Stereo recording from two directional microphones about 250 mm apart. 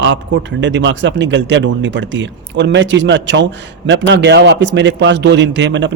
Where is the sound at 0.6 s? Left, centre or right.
Right.